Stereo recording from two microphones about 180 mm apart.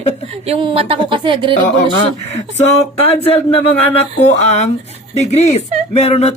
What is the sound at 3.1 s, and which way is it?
A woman's voice, 35° left (ahead or behind).